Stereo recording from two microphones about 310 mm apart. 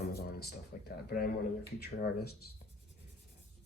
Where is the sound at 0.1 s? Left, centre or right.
Left.